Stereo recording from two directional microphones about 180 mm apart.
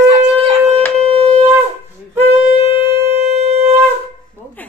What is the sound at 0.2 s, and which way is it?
Shofar, 35° right (ahead or behind).